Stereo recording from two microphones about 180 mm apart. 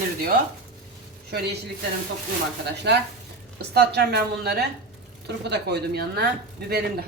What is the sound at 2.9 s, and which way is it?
A woman's voice, 70° right (ahead or behind).